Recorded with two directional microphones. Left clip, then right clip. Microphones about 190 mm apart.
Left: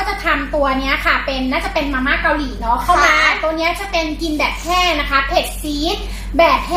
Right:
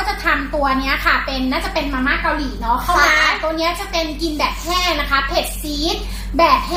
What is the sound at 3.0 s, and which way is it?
A child's voice, 10° right (ahead or behind).